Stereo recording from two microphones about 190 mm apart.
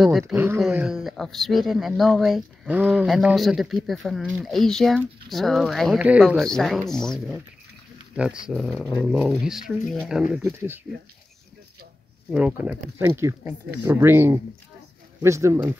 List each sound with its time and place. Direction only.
0.6 s speech: 5° right (ahead or behind)
12.3 s speech: 5° right (ahead or behind)